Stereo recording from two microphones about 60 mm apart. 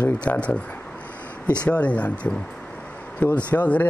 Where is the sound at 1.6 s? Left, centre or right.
Left.